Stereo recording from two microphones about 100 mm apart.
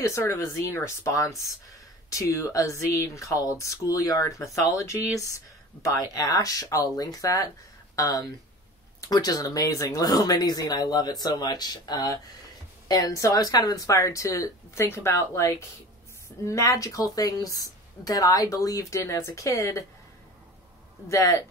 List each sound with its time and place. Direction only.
0.0 s a woman's voice: 30° left (ahead or behind)
21.1 s a woman's voice: 30° left (ahead or behind)